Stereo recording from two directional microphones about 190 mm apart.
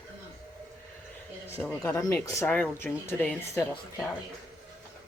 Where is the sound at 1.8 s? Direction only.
15° left (ahead or behind).